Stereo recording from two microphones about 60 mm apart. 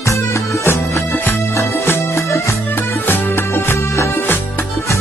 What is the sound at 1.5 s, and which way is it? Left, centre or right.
Music, left.